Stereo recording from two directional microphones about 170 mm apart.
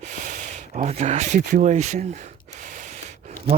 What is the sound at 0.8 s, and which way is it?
Speech, 40° right (ahead or behind).